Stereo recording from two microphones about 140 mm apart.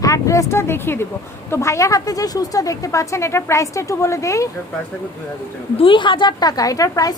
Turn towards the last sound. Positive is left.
turn(degrees=25)  # may be behind; listen again after turning